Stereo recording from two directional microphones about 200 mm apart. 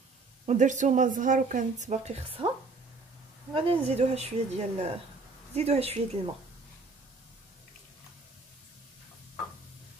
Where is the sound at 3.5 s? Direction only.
30° right (ahead or behind).